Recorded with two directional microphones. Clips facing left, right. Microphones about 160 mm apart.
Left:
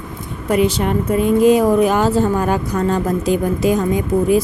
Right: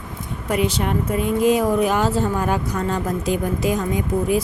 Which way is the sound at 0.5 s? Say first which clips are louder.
Left 5 dB; 35° left (ahead or behind).